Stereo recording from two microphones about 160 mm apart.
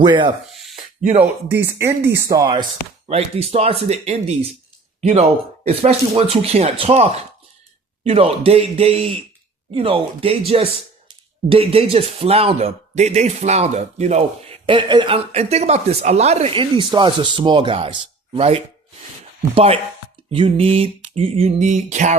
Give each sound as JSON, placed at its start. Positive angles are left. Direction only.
{"t": 0.0, "sound": "speech", "side_deg": -30}
{"t": 1.5, "sound": "speech", "side_deg": -15}
{"t": 3.1, "sound": "speech", "side_deg": -40}
{"t": 5.6, "sound": "speech", "side_deg": -40}